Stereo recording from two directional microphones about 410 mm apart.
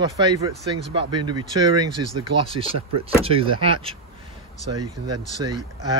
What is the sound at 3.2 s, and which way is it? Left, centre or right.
Speech, centre.